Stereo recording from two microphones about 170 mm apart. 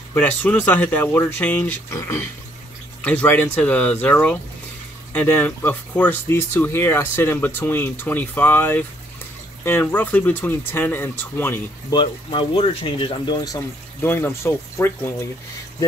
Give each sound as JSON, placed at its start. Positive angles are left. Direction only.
{"t": 0.1, "sound": "speech", "side_deg": 10}
{"t": 11.9, "sound": "speech", "side_deg": 30}
{"t": 13.6, "sound": "speech", "side_deg": 15}